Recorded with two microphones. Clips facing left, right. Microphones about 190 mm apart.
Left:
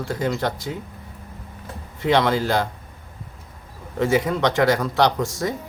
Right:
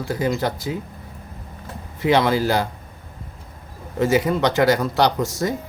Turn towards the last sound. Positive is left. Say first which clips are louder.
# right 1 dB
turn(degrees=0)  # may be behind; listen again after turning